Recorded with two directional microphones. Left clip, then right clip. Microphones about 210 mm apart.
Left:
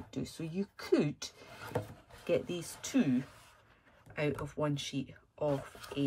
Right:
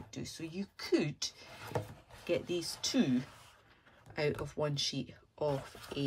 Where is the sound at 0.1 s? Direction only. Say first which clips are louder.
Left 3 dB; centre (ahead or behind).